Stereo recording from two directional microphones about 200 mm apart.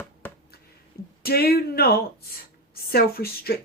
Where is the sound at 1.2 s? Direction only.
50° left (ahead or behind).